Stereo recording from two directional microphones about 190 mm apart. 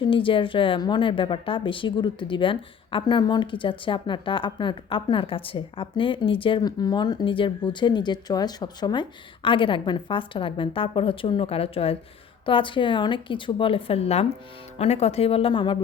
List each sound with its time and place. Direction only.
0.0 s a woman's voice: 25° left (ahead or behind)